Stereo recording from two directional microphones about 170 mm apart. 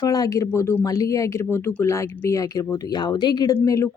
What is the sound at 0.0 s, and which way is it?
Speech, 20° left (ahead or behind).